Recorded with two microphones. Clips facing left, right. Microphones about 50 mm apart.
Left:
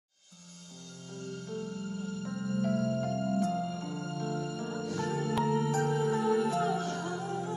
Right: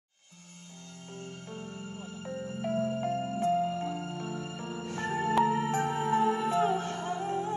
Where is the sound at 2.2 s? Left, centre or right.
Right.